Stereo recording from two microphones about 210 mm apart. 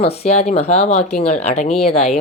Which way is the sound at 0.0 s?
30° left (ahead or behind).